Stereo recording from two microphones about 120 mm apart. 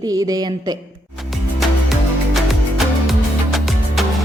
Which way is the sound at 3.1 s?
Centre (ahead or behind).